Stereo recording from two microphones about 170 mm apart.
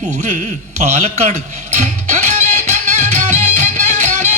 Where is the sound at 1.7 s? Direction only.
45° right (ahead or behind).